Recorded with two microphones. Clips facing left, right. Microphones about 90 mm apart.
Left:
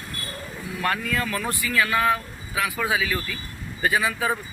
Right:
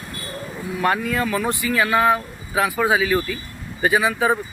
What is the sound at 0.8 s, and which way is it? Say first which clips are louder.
Speech: right 5 dB; 20° right (ahead or behind).